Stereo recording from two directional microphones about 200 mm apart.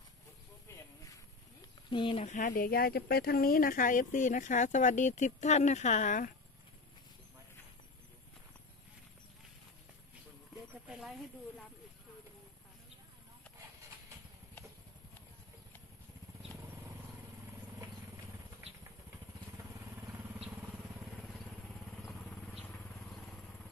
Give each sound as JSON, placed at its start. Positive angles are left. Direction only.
{"t": 0.7, "sound": "a sound", "side_deg": 15}
{"t": 1.9, "sound": "speech", "side_deg": 25}
{"t": 10.9, "sound": "snake", "side_deg": -5}